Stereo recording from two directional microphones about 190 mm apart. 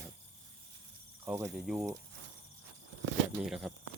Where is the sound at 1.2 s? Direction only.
10° right (ahead or behind).